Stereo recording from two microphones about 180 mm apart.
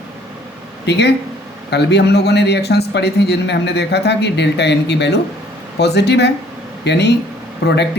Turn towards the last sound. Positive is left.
turn(degrees=70)  # may be behind; listen again after turning